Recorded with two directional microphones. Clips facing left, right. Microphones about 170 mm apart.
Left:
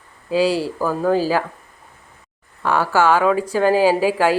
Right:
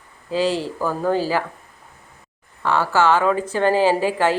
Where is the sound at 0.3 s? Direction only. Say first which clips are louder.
Left 3 dB; 10° left (ahead or behind).